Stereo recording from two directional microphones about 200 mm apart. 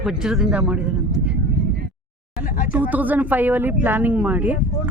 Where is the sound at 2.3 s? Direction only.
45° left (ahead or behind).